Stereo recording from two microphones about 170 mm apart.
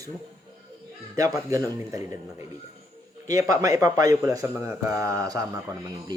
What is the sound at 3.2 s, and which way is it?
Speech, 20° right (ahead or behind).